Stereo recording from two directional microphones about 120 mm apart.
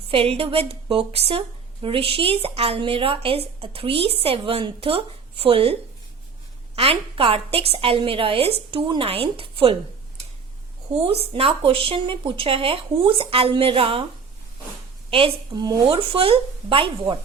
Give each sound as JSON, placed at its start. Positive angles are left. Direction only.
{"t": 0.1, "sound": "a woman's voice", "side_deg": -55}
{"t": 6.7, "sound": "a woman's voice", "side_deg": -55}
{"t": 10.9, "sound": "a woman's voice", "side_deg": -55}
{"t": 15.1, "sound": "a woman's voice", "side_deg": -50}
{"t": 15.6, "sound": "speech", "side_deg": -35}
{"t": 16.0, "sound": "a woman's voice", "side_deg": -50}